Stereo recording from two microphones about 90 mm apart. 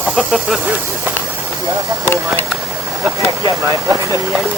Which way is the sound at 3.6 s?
30° right (ahead or behind).